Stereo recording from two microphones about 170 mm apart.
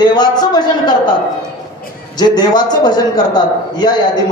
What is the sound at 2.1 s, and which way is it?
A man's voice, 25° left (ahead or behind).